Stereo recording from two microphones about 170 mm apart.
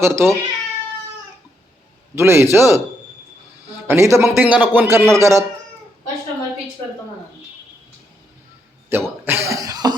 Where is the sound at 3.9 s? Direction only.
15° right (ahead or behind).